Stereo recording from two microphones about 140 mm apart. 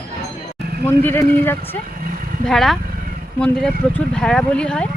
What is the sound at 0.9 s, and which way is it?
Speech, 15° left (ahead or behind).